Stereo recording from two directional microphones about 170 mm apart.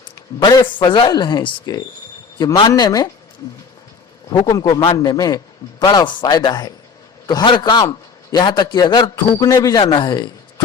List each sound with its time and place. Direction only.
0.0 s a man's voice: 25° left (ahead or behind)
4.3 s a man's voice: 25° left (ahead or behind)